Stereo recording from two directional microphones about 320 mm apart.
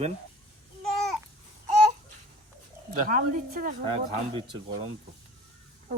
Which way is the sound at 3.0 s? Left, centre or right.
Right.